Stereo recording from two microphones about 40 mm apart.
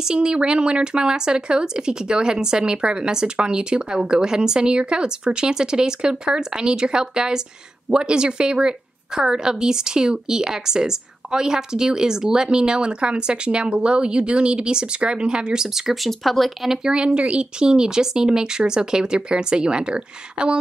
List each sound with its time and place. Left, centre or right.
0.0 s a woman's voice: right
15.9 s speech: centre
16.6 s a woman's voice: centre
16.9 s speech: right